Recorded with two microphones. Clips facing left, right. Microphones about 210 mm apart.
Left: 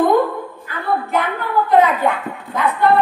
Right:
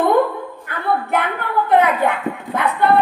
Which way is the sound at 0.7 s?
60° right (ahead or behind).